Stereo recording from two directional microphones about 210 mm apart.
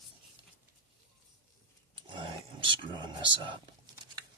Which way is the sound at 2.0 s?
25° right (ahead or behind).